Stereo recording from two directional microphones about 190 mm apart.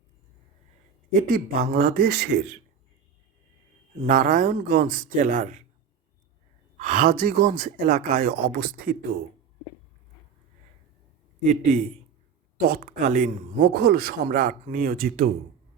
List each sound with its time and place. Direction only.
1.1 s a man's voice: 45° right (ahead or behind)
4.0 s a man's voice: 45° right (ahead or behind)
6.7 s a man's voice: 45° right (ahead or behind)
11.4 s a man's voice: 45° right (ahead or behind)